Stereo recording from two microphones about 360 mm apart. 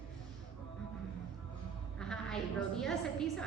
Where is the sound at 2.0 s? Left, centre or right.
Centre.